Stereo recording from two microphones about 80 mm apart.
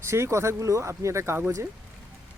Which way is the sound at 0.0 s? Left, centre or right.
Right.